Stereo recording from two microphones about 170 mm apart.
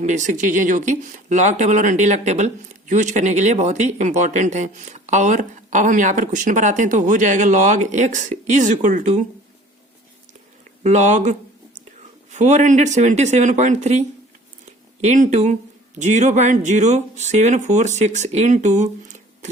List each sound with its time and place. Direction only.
0.0 s speech: 45° right (ahead or behind)
10.8 s speech: 45° right (ahead or behind)
14.6 s a sound: 45° right (ahead or behind)
16.0 s speech: 45° right (ahead or behind)